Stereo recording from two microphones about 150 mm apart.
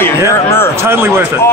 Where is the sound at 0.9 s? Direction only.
15° right (ahead or behind).